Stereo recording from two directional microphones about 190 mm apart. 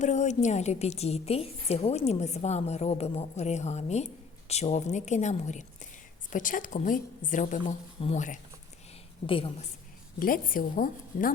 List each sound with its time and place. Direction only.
0.0 s a woman's voice: 40° left (ahead or behind)
10.2 s a woman's voice: 45° left (ahead or behind)